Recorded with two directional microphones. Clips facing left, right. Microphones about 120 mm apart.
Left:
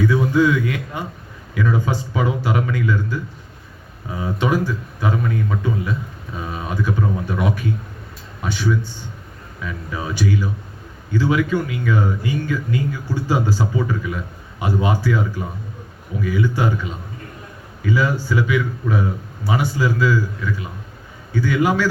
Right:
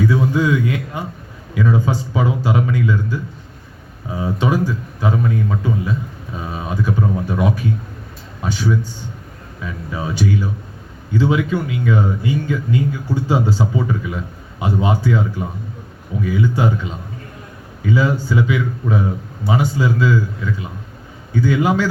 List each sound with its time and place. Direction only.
0.1 s speech: 20° right (ahead or behind)
11.1 s speech: 25° right (ahead or behind)